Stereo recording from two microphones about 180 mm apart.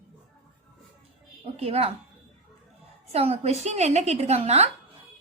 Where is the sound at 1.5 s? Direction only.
35° right (ahead or behind).